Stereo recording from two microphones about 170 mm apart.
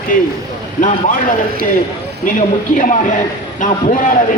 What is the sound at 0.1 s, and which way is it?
Speech, 55° left (ahead or behind).